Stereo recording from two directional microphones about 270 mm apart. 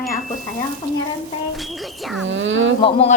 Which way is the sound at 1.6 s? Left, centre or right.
Centre.